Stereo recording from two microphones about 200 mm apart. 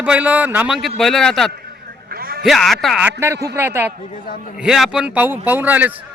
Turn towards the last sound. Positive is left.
turn(degrees=-10)  # may be behind; listen again after turning